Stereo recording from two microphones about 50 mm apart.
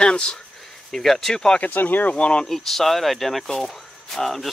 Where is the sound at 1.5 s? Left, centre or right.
Left.